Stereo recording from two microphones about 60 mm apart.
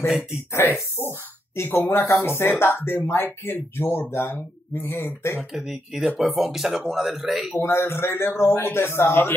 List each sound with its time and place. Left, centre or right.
0.5 s speech: left
5.5 s speech: centre
7.5 s speech: left